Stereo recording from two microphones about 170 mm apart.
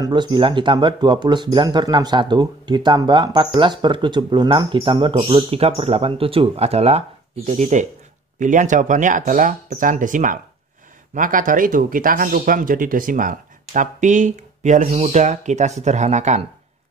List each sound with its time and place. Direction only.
0.0 s speech: 25° right (ahead or behind); by 16.4 s 45° right (ahead or behind)